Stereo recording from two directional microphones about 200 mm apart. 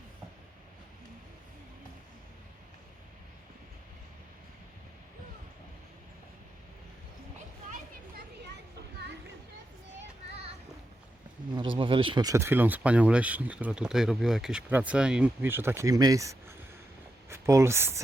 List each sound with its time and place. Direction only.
11.5 s speech: 25° right (ahead or behind)